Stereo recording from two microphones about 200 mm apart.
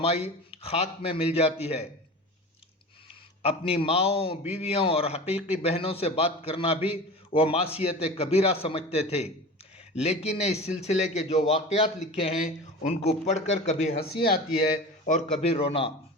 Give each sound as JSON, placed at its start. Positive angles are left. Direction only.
{"t": 0.0, "sound": "a man's voice", "side_deg": 30}
{"t": 3.1, "sound": "a man's voice", "side_deg": 30}
{"t": 14.0, "sound": "speech", "side_deg": 50}
{"t": 15.0, "sound": "a man's voice", "side_deg": 35}